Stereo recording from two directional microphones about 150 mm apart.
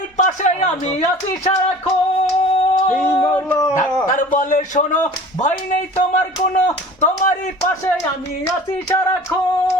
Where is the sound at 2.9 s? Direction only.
15° left (ahead or behind).